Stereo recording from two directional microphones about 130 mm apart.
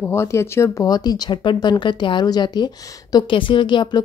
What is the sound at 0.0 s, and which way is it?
Speech, 20° left (ahead or behind).